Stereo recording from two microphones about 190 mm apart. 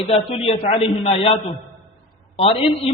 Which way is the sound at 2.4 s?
30° left (ahead or behind).